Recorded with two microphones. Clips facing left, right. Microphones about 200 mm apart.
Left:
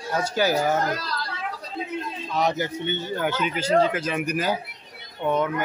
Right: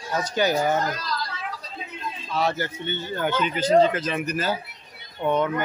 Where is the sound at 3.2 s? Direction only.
5° left (ahead or behind).